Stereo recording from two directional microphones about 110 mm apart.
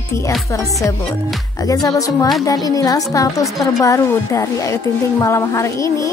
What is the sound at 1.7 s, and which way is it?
A woman's voice, 30° left (ahead or behind).